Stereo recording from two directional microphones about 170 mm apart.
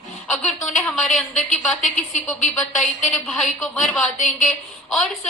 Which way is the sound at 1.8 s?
45° left (ahead or behind).